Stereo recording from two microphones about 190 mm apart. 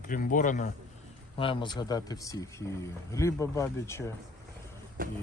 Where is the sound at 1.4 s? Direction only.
25° left (ahead or behind).